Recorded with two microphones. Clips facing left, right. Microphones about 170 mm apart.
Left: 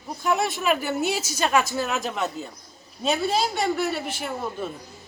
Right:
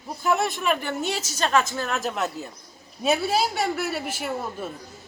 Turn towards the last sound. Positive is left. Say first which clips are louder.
# even
turn(degrees=-5)  # may be behind; listen again after turning